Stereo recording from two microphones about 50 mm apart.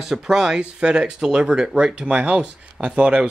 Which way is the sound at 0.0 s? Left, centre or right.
Centre.